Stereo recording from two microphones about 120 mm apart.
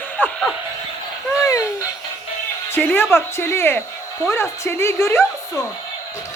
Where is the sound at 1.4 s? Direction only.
25° left (ahead or behind).